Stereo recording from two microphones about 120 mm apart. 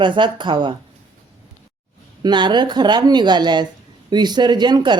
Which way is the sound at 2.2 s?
40° right (ahead or behind).